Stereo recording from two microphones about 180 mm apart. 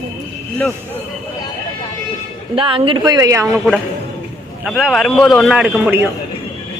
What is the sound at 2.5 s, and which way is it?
Speech, 30° right (ahead or behind).